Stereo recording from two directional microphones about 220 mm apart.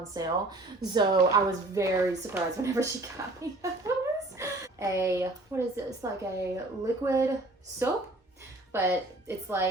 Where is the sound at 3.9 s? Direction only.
15° right (ahead or behind).